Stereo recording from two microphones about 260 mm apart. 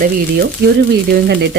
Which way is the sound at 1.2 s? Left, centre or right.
Right.